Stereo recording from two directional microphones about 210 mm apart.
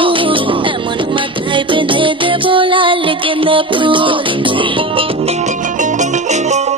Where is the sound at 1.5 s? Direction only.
25° right (ahead or behind).